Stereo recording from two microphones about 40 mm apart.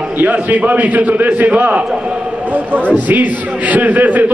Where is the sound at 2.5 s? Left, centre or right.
Right.